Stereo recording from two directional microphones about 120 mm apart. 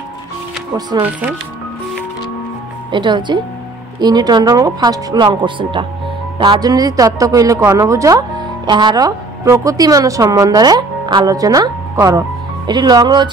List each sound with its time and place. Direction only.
2.9 s speech: 40° right (ahead or behind)